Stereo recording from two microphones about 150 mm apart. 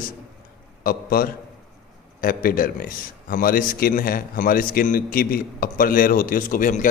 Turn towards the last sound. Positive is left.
turn(degrees=60)  # may be behind; listen again after turning